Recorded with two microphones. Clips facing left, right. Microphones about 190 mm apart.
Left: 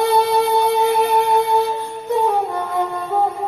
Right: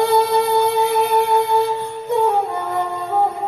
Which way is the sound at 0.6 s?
55° left (ahead or behind).